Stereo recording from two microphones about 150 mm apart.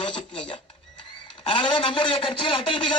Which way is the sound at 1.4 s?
35° left (ahead or behind).